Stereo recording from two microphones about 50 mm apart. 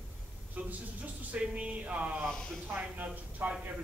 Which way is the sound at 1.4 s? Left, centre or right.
Right.